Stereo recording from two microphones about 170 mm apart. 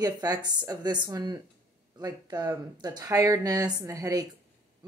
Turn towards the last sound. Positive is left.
turn(degrees=-20)  # may be behind; listen again after turning